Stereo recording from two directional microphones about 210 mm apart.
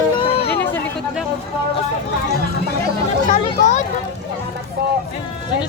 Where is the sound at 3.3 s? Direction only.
35° left (ahead or behind).